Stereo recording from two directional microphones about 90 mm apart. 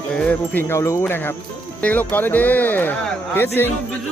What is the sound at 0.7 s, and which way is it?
Speech, 35° left (ahead or behind).